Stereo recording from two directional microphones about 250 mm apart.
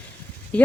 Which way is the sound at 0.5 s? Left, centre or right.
Centre.